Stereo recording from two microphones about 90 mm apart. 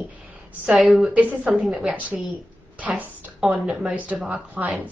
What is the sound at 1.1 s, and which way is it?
Speech, 15° right (ahead or behind).